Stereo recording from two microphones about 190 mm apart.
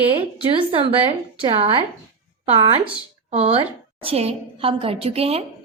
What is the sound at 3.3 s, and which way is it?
A woman's voice, 35° right (ahead or behind).